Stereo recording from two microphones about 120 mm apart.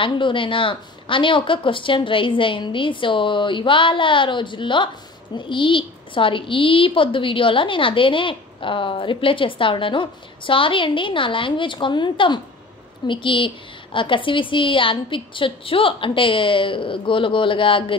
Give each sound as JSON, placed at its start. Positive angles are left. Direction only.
{"t": 0.0, "sound": "a woman's voice", "side_deg": 45}